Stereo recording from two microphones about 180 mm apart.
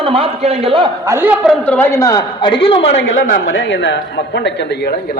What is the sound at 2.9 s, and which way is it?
Speech, 75° left (ahead or behind).